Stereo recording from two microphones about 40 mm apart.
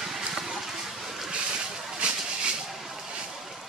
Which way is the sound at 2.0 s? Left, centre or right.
Right.